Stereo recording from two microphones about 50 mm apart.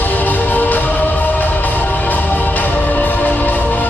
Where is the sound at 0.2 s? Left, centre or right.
Left.